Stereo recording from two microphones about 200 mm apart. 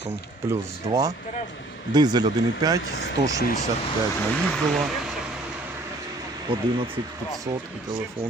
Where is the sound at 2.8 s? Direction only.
55° left (ahead or behind).